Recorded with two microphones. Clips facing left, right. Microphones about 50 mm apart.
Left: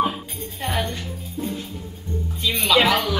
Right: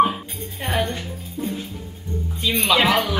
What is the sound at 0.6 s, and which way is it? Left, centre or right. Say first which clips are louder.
Music: right 1 dB; right.